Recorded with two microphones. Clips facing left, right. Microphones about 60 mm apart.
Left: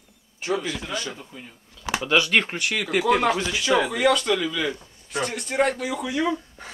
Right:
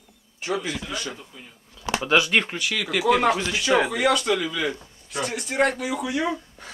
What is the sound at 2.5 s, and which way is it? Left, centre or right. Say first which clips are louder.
Speech: left 2 dB; left.